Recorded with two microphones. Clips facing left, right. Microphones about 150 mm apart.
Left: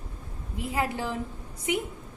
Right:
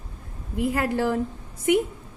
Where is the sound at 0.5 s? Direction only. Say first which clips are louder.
Right 6 dB; 55° right (ahead or behind).